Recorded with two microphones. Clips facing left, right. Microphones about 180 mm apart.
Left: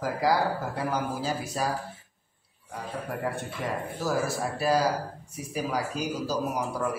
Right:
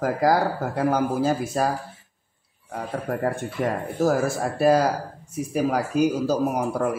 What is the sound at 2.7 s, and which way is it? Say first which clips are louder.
Speech: right 6 dB; 50° right (ahead or behind).